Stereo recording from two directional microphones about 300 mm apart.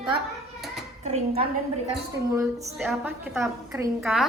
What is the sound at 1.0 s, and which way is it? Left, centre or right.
Speech, right.